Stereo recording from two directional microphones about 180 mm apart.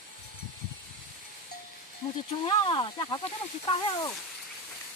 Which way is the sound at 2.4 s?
25° left (ahead or behind).